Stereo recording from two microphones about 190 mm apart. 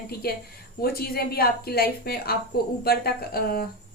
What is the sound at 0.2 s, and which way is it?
A woman's voice, 55° left (ahead or behind).